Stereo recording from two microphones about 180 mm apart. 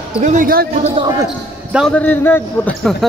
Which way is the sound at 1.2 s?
5° right (ahead or behind).